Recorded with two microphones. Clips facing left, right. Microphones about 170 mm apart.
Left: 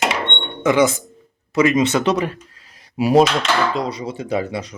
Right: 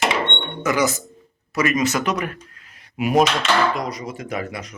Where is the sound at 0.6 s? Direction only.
25° left (ahead or behind).